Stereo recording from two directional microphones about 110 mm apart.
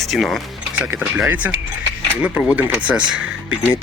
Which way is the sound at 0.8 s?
20° right (ahead or behind).